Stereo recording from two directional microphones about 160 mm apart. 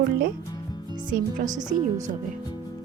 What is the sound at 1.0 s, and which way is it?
Speech, 55° right (ahead or behind).